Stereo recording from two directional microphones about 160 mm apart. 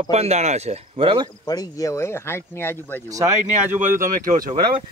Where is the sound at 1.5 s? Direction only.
20° left (ahead or behind).